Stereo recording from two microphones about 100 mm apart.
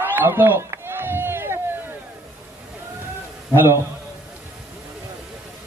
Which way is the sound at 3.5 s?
20° right (ahead or behind).